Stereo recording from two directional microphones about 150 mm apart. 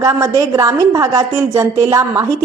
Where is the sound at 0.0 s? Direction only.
20° right (ahead or behind).